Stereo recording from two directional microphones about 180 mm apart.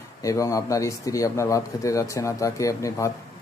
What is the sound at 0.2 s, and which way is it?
Speech, 15° left (ahead or behind).